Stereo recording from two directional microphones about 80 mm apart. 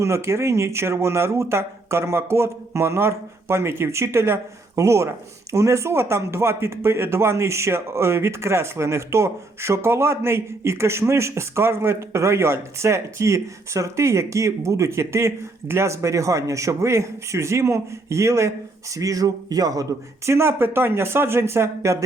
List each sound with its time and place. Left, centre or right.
0.0 s speech: right
20.2 s speech: right